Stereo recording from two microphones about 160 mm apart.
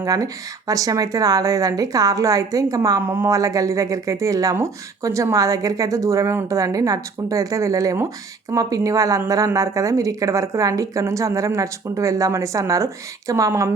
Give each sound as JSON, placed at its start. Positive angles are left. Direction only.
{"t": 0.0, "sound": "a woman's voice", "side_deg": -20}